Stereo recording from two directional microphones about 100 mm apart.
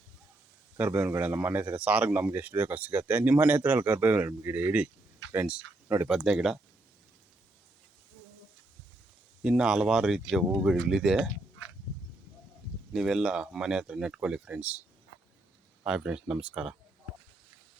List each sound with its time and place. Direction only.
0.8 s speech: 20° right (ahead or behind)
9.4 s speech: 5° right (ahead or behind)
12.9 s speech: 5° right (ahead or behind)
15.8 s speech: 10° right (ahead or behind)